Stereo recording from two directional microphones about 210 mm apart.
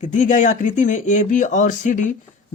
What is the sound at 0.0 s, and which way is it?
Speech, 35° left (ahead or behind).